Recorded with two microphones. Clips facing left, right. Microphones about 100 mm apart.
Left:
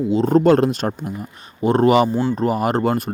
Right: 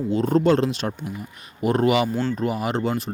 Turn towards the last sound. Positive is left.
turn(degrees=55)  # may be behind; listen again after turning